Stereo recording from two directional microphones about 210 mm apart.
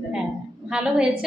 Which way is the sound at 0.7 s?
5° right (ahead or behind).